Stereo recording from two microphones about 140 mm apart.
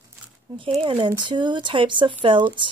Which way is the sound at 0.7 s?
40° right (ahead or behind).